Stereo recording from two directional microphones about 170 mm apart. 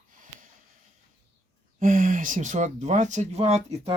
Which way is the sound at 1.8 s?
50° right (ahead or behind).